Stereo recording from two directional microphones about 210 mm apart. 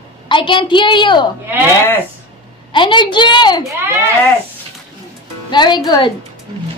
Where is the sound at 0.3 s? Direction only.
25° left (ahead or behind).